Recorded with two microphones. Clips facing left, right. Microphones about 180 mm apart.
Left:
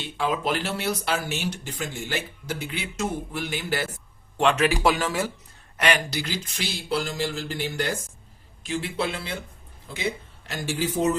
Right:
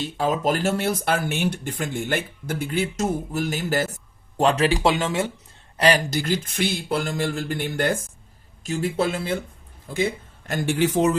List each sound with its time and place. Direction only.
0.0 s speech: 40° right (ahead or behind); by 5.3 s 25° right (ahead or behind)
5.7 s speech: 35° right (ahead or behind); by 11.2 s 85° right